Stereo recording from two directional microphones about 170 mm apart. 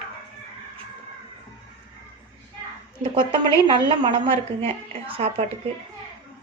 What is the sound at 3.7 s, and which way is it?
A woman's voice, 30° right (ahead or behind).